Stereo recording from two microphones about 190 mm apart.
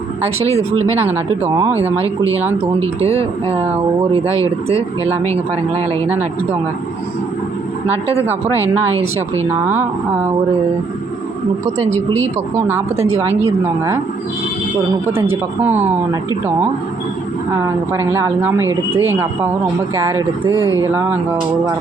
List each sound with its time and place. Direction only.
1.0 s speech: 15° right (ahead or behind)
2.8 s speech: 30° right (ahead or behind)
4.3 s speech: 15° left (ahead or behind)
5.3 s speech: 30° right (ahead or behind)
8.6 s speech: 10° right (ahead or behind)
11.8 s speech: 35° right (ahead or behind)
12.5 s speech: 10° right (ahead or behind)
15.1 s speech: 10° right (ahead or behind)
17.9 s speech: 15° right (ahead or behind)